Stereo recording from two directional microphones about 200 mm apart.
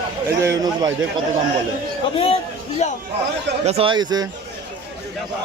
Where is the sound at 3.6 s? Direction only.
30° right (ahead or behind).